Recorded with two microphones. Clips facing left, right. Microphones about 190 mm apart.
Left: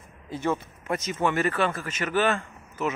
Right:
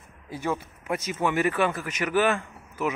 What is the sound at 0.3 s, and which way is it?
Speech, 10° right (ahead or behind).